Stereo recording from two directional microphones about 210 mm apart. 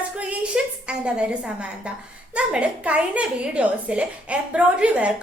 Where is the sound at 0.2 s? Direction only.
5° right (ahead or behind).